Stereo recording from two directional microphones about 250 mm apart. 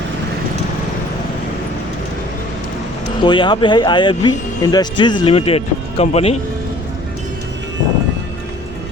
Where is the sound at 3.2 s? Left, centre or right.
Centre.